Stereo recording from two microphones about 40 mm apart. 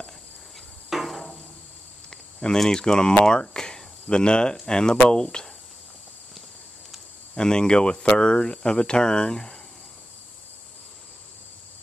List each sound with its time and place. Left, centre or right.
0.8 s insect: centre
2.0 s speech: centre
7.3 s speech: centre